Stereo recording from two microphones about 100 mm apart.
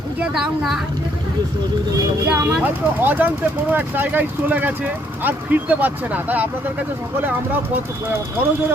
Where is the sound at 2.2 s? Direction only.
15° right (ahead or behind).